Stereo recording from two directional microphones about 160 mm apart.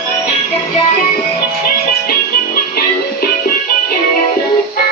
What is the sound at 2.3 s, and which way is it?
Music, 65° left (ahead or behind).